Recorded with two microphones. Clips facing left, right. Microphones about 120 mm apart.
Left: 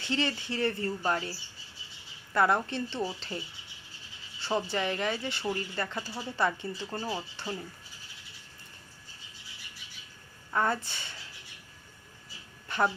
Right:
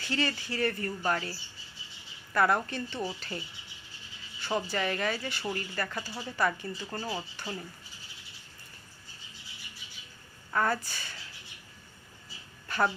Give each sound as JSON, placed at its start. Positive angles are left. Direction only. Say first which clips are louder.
{"t": 0.0, "sound": "speech", "louder": "left 1 dB", "side_deg": 20}
{"t": 6.9, "sound": "speech", "louder": "left 1 dB", "side_deg": 10}
{"t": 10.5, "sound": "speech", "louder": "even", "side_deg": 20}
{"t": 12.6, "sound": "a sound", "louder": "even", "side_deg": 20}